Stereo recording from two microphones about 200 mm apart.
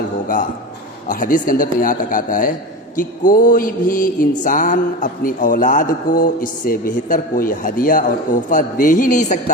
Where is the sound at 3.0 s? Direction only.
40° left (ahead or behind).